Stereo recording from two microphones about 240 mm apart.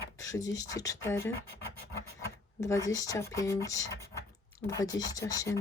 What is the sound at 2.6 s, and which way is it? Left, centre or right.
Speech, centre.